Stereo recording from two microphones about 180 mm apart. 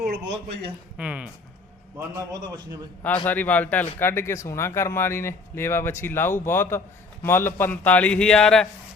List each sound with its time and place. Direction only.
0.1 s a man's voice: 70° right (ahead or behind)
0.9 s speech: 5° right (ahead or behind)
2.0 s a man's voice: 20° right (ahead or behind)
3.2 s speech: 10° left (ahead or behind)